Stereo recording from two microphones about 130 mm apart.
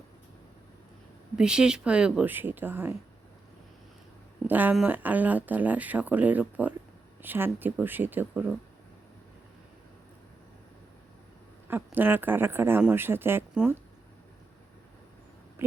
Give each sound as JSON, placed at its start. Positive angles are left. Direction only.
{"t": 1.4, "sound": "speech", "side_deg": -5}
{"t": 4.4, "sound": "speech", "side_deg": -15}
{"t": 11.7, "sound": "speech", "side_deg": -15}